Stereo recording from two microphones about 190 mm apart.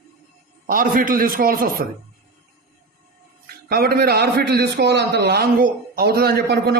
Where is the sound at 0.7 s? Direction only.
45° right (ahead or behind).